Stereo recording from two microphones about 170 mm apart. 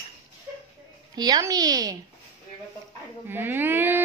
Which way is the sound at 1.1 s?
25° right (ahead or behind).